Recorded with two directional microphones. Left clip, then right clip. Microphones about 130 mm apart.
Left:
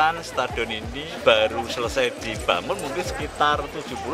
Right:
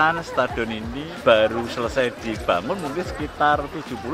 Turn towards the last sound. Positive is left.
turn(degrees=35)  # may be behind; listen again after turning